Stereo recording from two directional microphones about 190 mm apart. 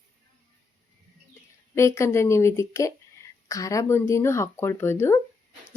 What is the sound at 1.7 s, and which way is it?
A woman's voice, 15° left (ahead or behind).